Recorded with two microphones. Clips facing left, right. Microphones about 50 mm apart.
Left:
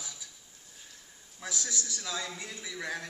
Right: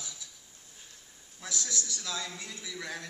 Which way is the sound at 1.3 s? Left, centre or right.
Centre.